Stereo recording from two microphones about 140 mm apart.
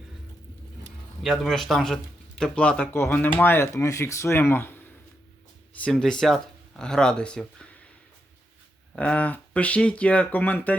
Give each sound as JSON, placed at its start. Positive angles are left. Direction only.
{"t": 1.2, "sound": "speech", "side_deg": 0}
{"t": 5.8, "sound": "speech", "side_deg": 5}
{"t": 9.0, "sound": "speech", "side_deg": 10}